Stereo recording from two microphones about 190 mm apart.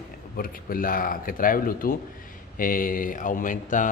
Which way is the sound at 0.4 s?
50° left (ahead or behind).